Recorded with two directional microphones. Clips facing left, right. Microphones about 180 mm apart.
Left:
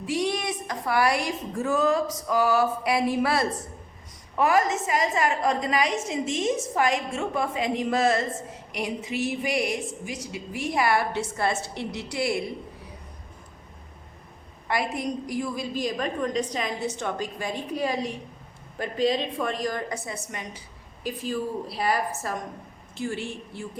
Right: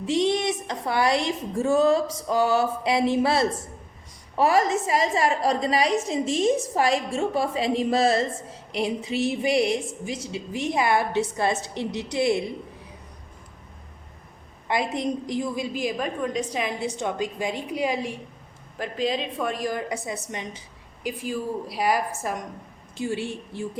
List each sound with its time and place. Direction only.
0.0 s a woman's voice: 25° right (ahead or behind)
14.7 s a woman's voice: 20° right (ahead or behind)
15.7 s a woman's voice: 10° right (ahead or behind)
20.3 s a woman's voice: 20° right (ahead or behind)
21.0 s a woman's voice: 10° right (ahead or behind)